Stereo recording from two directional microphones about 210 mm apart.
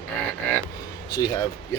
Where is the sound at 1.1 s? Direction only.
20° left (ahead or behind).